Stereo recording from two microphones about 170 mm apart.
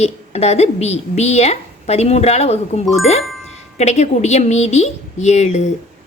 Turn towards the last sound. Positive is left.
turn(degrees=40)  # may be behind; listen again after turning